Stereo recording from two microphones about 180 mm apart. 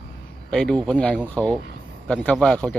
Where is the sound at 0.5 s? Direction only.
5° left (ahead or behind).